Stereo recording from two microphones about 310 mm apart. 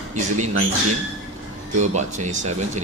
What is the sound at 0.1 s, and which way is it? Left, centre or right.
Speech, right.